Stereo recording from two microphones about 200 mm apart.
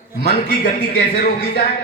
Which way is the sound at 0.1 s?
50° left (ahead or behind).